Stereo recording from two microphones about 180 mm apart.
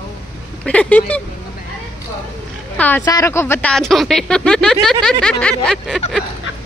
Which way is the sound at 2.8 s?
10° left (ahead or behind).